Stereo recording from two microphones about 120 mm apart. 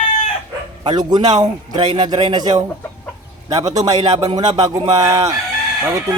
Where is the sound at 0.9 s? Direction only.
35° right (ahead or behind).